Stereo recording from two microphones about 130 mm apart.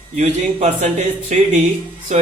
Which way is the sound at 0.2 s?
65° right (ahead or behind).